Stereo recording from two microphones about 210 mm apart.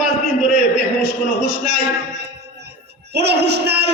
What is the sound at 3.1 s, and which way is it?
Speech, 50° right (ahead or behind).